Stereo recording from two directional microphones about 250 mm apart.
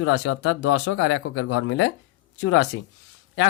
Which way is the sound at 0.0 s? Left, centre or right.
Left.